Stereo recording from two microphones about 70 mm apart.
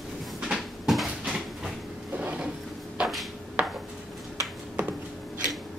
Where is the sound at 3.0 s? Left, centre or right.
Centre.